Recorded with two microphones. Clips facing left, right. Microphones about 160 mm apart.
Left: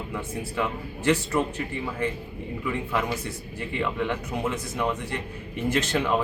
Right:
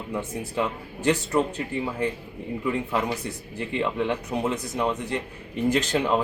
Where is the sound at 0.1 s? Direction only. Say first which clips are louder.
Right 2 dB; 20° right (ahead or behind).